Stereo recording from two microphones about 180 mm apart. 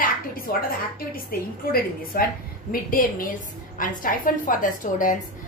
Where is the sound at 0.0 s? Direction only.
55° left (ahead or behind).